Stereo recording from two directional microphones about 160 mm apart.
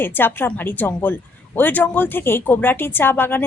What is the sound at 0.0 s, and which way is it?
A woman's voice, 15° left (ahead or behind).